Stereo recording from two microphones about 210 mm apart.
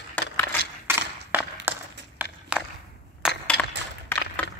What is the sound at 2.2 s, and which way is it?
Walk, 10° right (ahead or behind).